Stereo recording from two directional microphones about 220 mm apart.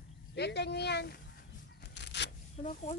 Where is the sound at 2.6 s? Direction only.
35° left (ahead or behind).